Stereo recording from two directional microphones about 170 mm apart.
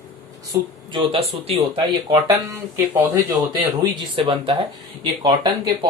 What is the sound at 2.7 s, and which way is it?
Speech, 15° right (ahead or behind).